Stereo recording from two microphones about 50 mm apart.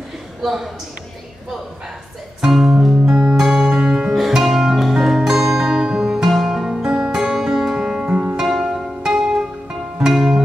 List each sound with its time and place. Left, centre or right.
0.4 s a man's voice: centre
2.4 s speech: centre
2.7 s music: centre
4.1 s music: centre
8.0 s music: right
8.4 s music: centre